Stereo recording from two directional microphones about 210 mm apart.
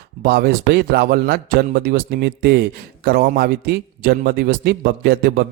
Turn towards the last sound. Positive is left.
turn(degrees=-45)  # may be behind; listen again after turning